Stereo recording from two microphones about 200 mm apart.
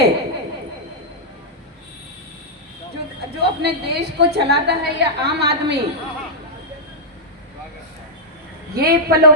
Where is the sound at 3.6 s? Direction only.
55° right (ahead or behind).